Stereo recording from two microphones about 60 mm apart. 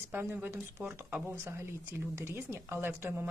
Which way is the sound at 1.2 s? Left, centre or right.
Right.